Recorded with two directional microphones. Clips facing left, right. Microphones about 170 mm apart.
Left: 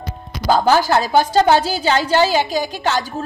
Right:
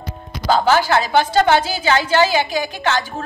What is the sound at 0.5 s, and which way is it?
A woman's voice, 40° left (ahead or behind).